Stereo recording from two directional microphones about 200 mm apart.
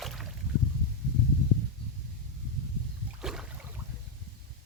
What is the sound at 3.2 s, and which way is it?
Boat, 5° right (ahead or behind).